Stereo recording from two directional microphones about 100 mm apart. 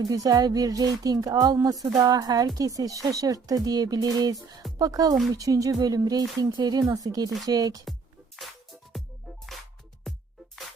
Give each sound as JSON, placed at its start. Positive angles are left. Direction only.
{"t": 0.0, "sound": "speech", "side_deg": -35}
{"t": 8.4, "sound": "music", "side_deg": 0}